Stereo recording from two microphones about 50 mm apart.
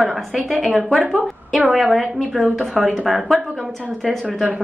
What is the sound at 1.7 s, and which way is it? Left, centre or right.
A woman's voice, centre.